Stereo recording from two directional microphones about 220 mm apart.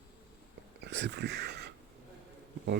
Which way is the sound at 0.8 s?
50° right (ahead or behind).